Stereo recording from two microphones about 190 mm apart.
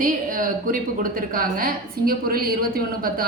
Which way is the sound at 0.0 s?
45° right (ahead or behind).